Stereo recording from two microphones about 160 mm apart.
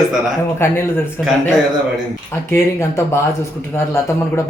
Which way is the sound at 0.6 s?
15° left (ahead or behind).